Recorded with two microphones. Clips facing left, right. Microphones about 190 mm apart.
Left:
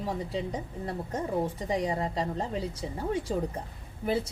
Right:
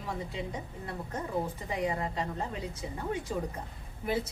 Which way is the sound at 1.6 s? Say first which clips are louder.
Left 3 dB; 35° left (ahead or behind).